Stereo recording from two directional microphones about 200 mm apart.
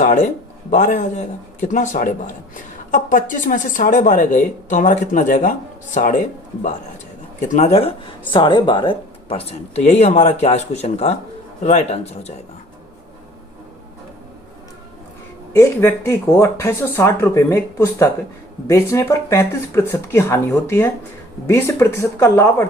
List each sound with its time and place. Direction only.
0.0 s a sound: 40° left (ahead or behind)
0.7 s speech: 35° left (ahead or behind)
7.4 s speech: 35° left (ahead or behind)
15.5 s speech: 10° left (ahead or behind)